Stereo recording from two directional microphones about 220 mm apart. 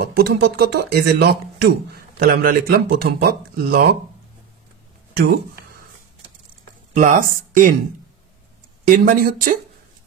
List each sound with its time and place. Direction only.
0.0 s speech: 45° right (ahead or behind)
5.1 s a sound: 45° right (ahead or behind)
7.0 s speech: 35° right (ahead or behind)
8.8 s speech: 35° right (ahead or behind)